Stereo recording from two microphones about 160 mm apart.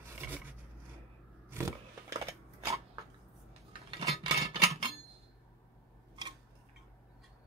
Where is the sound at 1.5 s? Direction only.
15° right (ahead or behind).